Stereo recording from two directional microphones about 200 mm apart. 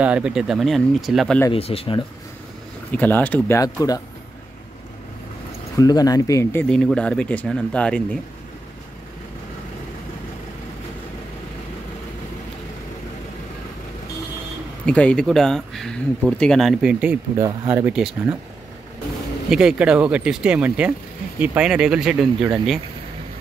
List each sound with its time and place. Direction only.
0.0 s speech: 5° right (ahead or behind)
1.5 s speech: 30° left (ahead or behind)
2.9 s speech: 10° left (ahead or behind)
5.8 s speech: 20° left (ahead or behind)
14.9 s speech: 5° left (ahead or behind)
19.5 s speech: 5° right (ahead or behind)